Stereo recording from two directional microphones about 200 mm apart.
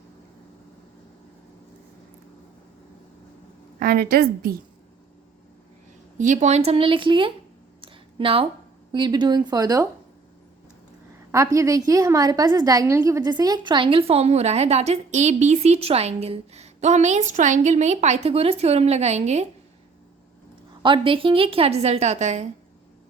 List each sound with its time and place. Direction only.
3.8 s a woman's voice: 50° right (ahead or behind)
6.1 s a woman's voice: 40° right (ahead or behind)
7.8 s a sound: 25° right (ahead or behind)
8.9 s a woman's voice: 20° right (ahead or behind)
11.3 s a woman's voice: 15° right (ahead or behind); by 19.5 s 35° right (ahead or behind)
20.8 s a woman's voice: 25° right (ahead or behind)